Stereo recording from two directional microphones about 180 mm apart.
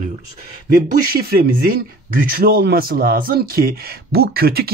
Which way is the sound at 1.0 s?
55° right (ahead or behind).